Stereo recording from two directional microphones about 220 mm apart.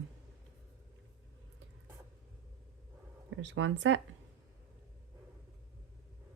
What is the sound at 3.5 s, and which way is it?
Speech, 55° right (ahead or behind).